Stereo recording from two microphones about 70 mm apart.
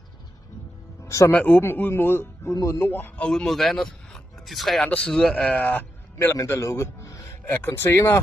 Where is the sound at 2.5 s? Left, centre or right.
Left.